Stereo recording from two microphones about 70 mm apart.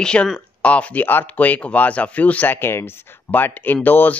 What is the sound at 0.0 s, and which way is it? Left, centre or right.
Speech, centre.